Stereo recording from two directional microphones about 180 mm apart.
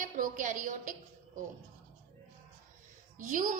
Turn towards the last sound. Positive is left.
turn(degrees=-50)  # may be behind; listen again after turning